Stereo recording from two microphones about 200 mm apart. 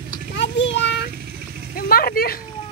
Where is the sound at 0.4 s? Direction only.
65° left (ahead or behind).